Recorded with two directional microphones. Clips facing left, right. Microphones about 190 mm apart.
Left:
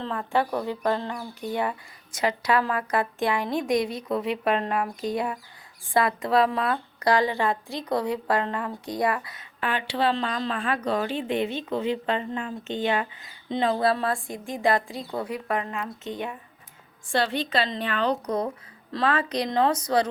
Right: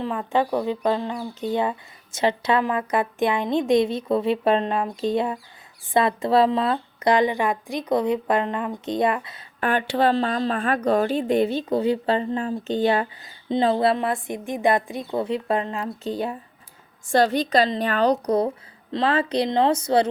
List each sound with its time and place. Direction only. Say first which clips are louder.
0.0 s a woman's voice: right 3 dB; 15° right (ahead or behind)
9.6 s a woman's voice: right 5 dB; 45° right (ahead or behind); by 20.1 s 25° right (ahead or behind)